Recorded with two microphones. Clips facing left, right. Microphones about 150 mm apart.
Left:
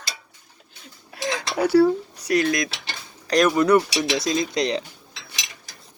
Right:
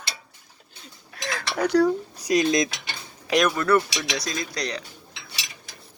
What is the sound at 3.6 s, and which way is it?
Speech, 15° left (ahead or behind).